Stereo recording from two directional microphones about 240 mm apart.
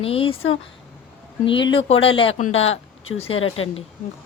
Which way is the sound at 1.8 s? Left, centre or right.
Left.